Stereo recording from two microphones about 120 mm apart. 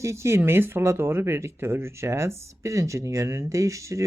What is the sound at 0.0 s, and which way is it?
Speech, 25° right (ahead or behind).